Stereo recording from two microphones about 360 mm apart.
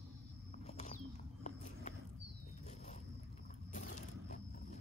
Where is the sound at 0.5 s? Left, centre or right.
Centre.